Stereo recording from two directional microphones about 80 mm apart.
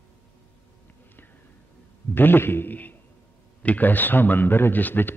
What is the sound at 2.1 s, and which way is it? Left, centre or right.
A man's voice, left.